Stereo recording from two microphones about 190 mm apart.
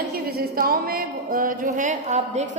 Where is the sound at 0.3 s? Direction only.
50° right (ahead or behind).